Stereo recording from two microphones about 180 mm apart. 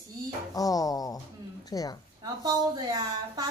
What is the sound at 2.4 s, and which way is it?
Speech, 20° right (ahead or behind).